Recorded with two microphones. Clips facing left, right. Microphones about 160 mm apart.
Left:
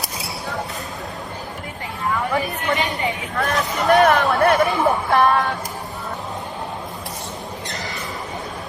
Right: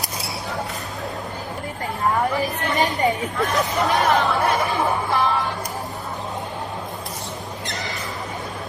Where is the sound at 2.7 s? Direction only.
40° right (ahead or behind).